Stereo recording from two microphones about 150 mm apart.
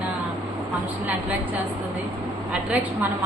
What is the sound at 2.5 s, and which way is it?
Speech, 10° right (ahead or behind).